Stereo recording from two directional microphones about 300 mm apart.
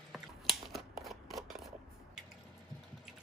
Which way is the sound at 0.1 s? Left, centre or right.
Centre.